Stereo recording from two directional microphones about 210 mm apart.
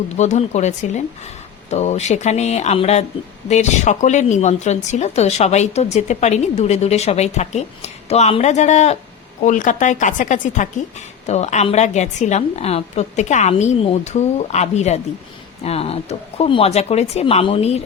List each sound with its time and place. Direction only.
0.2 s speech: 35° left (ahead or behind)